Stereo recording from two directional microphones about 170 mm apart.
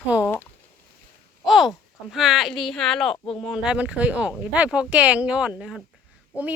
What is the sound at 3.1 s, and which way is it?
Speech, 30° left (ahead or behind).